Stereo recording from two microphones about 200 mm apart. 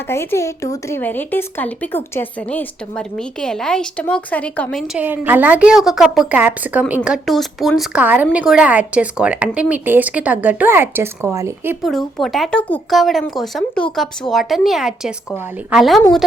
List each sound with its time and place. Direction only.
0.1 s a woman's voice: 15° left (ahead or behind)
5.0 s a woman's voice: 10° right (ahead or behind)
11.9 s a woman's voice: centre (ahead or behind)